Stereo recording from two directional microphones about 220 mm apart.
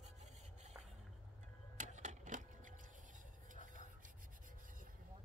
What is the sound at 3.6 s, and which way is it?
Rub, 35° right (ahead or behind).